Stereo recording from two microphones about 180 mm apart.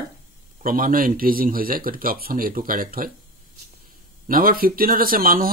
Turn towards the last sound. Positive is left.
turn(degrees=-50)  # may be behind; listen again after turning